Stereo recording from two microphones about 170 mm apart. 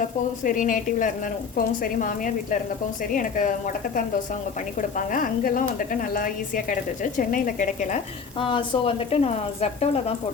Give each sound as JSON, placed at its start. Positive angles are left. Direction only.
{"t": 0.0, "sound": "a woman's voice", "side_deg": 50}
{"t": 8.4, "sound": "a woman's voice", "side_deg": 30}